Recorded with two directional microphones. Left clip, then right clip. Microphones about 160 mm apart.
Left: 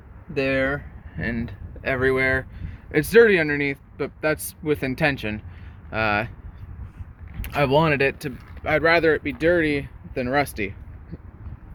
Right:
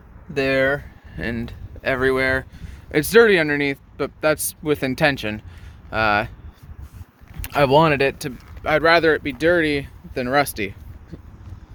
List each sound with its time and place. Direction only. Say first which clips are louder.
0.3 s speech: right 4 dB; 55° right (ahead or behind)
1.1 s speech: right 1 dB; 25° right (ahead or behind)
7.4 s speech: right 4 dB; 30° right (ahead or behind)
11.1 s vehicle: right 1 dB; 25° right (ahead or behind)